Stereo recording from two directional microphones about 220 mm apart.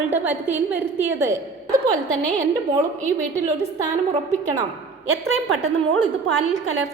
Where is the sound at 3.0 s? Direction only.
30° right (ahead or behind).